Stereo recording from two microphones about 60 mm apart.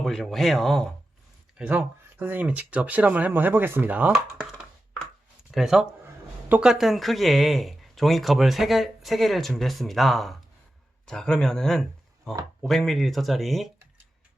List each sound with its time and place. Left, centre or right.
0.0 s speech: centre
1.6 s speech: centre
2.1 s speech: right
5.5 s speech: centre
11.0 s speech: centre